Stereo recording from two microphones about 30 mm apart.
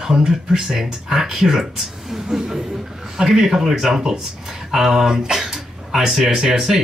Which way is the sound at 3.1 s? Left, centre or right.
Centre.